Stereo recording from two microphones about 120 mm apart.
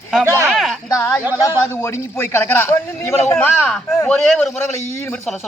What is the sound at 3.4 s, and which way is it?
A man's voice, 10° left (ahead or behind).